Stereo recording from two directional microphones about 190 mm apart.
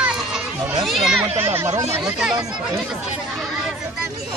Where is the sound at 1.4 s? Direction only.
15° right (ahead or behind).